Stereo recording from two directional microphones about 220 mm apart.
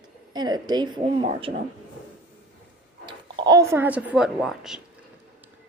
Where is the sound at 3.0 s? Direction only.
20° right (ahead or behind); by 4.8 s centre (ahead or behind).